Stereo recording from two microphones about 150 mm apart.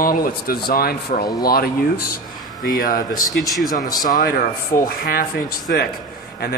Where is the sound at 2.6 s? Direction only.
70° left (ahead or behind).